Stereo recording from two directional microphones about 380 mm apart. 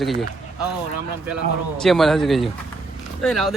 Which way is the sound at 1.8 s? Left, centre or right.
Centre.